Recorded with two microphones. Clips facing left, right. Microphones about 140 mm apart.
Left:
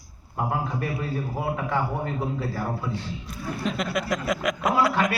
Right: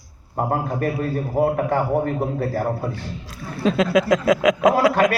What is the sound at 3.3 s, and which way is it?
Speech, 90° right.